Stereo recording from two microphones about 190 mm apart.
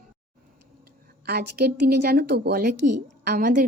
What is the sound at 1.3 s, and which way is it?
Speech, 55° right (ahead or behind).